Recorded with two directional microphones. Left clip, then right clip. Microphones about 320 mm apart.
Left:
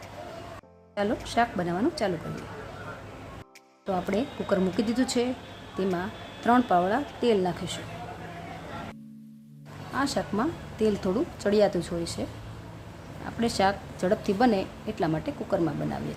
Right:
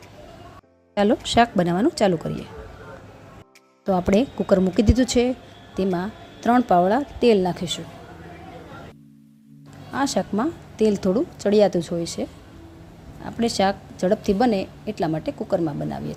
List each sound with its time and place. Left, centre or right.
0.9 s a woman's voice: right
3.8 s a woman's voice: right
9.9 s a woman's voice: centre
13.2 s a woman's voice: centre